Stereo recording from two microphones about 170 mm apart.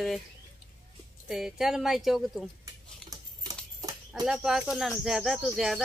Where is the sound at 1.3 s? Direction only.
Centre (ahead or behind).